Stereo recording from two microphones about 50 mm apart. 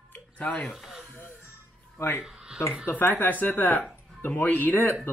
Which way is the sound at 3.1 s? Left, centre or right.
Left.